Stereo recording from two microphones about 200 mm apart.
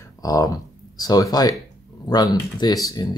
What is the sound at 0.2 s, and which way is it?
Speech, 15° left (ahead or behind).